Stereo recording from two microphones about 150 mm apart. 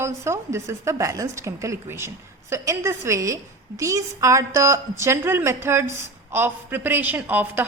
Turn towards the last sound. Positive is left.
turn(degrees=-10)  # may be behind; listen again after turning